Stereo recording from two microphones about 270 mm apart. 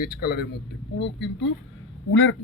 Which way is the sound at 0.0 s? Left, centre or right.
Left.